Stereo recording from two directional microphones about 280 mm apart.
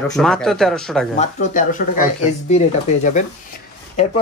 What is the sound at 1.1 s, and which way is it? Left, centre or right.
Speech, left.